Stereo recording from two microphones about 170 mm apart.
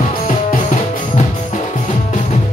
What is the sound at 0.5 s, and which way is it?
Music, 50° left (ahead or behind).